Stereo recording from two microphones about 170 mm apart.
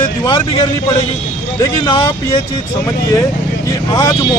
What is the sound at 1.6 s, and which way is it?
Speech, 20° left (ahead or behind).